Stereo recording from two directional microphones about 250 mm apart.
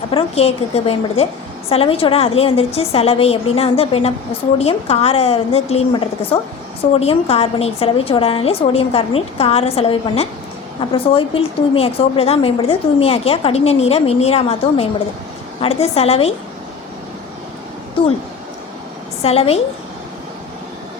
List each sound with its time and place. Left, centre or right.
0.1 s a woman's voice: left
18.0 s a woman's voice: left
19.2 s a woman's voice: left